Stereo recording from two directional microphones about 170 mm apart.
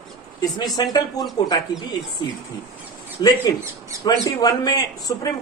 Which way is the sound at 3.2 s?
25° left (ahead or behind).